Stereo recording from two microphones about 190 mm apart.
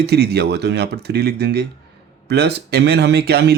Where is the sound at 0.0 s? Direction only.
60° right (ahead or behind).